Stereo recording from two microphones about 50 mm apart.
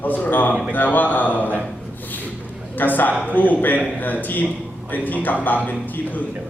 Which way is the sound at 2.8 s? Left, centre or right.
Left.